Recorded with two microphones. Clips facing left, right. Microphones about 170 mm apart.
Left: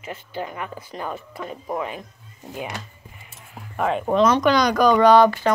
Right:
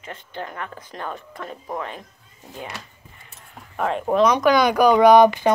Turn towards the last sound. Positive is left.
turn(degrees=-15)  # may be behind; listen again after turning